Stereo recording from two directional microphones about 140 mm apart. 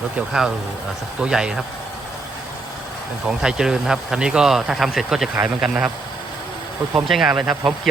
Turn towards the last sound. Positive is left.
turn(degrees=0)  # may be behind; listen again after turning